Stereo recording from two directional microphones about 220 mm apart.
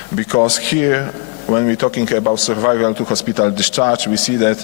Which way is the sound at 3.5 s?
10° left (ahead or behind).